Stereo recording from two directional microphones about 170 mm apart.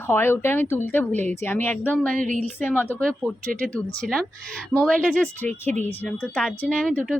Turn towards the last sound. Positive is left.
turn(degrees=5)  # may be behind; listen again after turning